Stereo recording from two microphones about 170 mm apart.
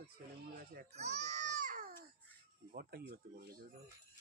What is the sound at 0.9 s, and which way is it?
Baby cry, 40° right (ahead or behind).